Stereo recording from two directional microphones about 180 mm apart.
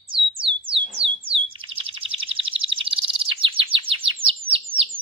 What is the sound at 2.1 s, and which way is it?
Bird, 30° right (ahead or behind).